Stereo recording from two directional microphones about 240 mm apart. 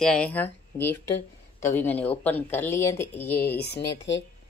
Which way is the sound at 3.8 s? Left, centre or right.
Left.